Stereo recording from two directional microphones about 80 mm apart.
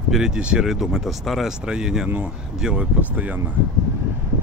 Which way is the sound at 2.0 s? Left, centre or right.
Centre.